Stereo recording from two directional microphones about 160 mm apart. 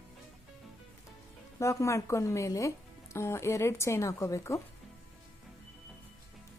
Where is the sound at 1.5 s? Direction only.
20° left (ahead or behind).